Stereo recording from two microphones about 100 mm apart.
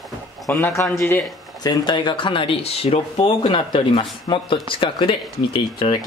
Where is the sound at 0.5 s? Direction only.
20° left (ahead or behind).